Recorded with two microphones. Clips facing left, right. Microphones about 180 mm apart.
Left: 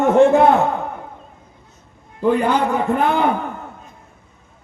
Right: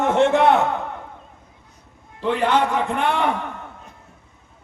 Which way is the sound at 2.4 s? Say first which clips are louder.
Left 1 dB; 90° right.